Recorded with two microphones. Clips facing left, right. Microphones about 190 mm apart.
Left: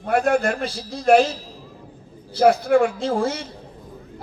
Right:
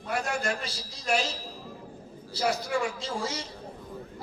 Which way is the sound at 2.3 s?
55° left (ahead or behind).